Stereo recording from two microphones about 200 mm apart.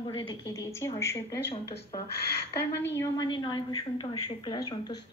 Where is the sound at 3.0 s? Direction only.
20° left (ahead or behind).